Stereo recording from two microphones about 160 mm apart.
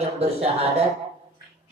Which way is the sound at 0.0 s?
40° right (ahead or behind).